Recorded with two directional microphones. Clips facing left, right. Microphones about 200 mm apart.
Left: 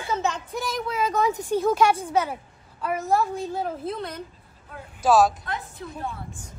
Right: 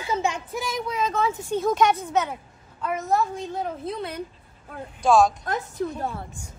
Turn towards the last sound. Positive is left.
turn(degrees=-45)  # may be behind; listen again after turning